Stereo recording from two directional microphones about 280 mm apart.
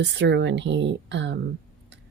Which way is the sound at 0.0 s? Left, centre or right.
Right.